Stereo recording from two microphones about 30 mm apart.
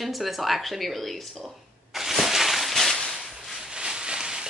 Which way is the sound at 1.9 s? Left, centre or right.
Centre.